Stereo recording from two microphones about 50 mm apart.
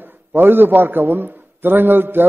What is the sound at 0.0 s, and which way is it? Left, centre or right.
A man's voice, right.